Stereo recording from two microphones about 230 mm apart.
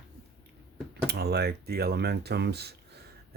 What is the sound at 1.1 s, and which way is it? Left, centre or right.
Speech, right.